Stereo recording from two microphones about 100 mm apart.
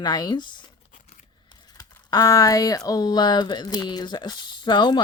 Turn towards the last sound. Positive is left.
turn(degrees=50)  # may be behind; listen again after turning